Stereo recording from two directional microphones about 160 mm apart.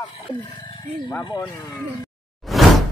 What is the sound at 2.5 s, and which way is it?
Whoosh, centre (ahead or behind).